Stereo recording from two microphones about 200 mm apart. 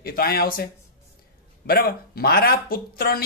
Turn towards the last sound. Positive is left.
turn(degrees=45)  # may be behind; listen again after turning